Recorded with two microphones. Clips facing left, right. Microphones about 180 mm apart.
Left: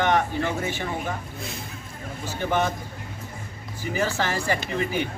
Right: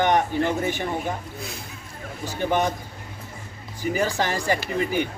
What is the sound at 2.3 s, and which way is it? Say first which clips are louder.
Speech: right 2 dB; 15° right (ahead or behind).